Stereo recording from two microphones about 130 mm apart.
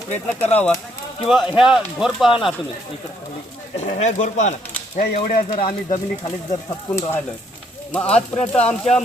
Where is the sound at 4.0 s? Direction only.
70° left (ahead or behind).